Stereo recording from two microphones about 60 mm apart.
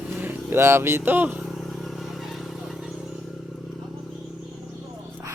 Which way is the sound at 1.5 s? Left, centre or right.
Centre.